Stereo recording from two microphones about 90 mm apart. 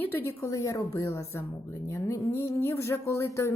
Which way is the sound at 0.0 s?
25° left (ahead or behind).